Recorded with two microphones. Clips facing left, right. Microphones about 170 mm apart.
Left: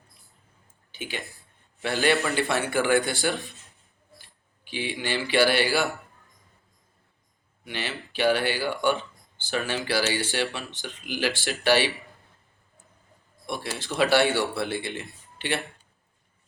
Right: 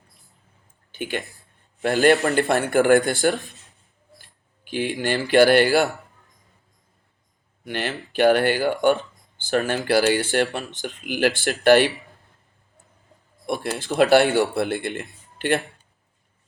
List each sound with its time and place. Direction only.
0.9 s a sound: 55° right (ahead or behind)
1.8 s a man's voice: 45° right (ahead or behind)
7.6 s a man's voice: 50° right (ahead or behind)
13.5 s speech: 55° right (ahead or behind)